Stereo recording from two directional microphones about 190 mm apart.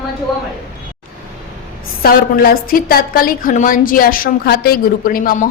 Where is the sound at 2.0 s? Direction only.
50° left (ahead or behind).